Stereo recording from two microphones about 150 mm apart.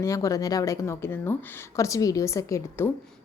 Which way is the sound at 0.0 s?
20° left (ahead or behind).